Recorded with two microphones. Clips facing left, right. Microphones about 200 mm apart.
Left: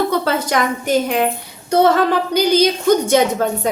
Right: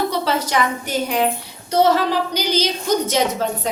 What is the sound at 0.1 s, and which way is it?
A woman's voice, 55° left (ahead or behind).